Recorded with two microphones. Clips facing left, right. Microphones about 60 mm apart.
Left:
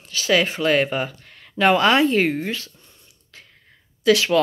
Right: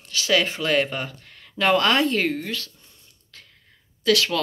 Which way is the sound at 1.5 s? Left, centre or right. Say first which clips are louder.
Left 3 dB; centre.